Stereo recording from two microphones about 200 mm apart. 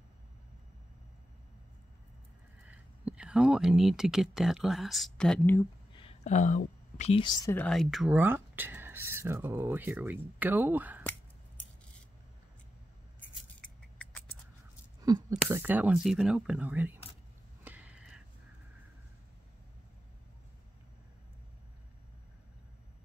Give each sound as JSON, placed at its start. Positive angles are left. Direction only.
{"t": 2.7, "sound": "speech", "side_deg": -5}
{"t": 5.9, "sound": "speech", "side_deg": 30}
{"t": 7.5, "sound": "speech", "side_deg": 5}
{"t": 13.6, "sound": "scissors", "side_deg": 5}
{"t": 15.0, "sound": "speech", "side_deg": -15}
{"t": 17.6, "sound": "a sound", "side_deg": -5}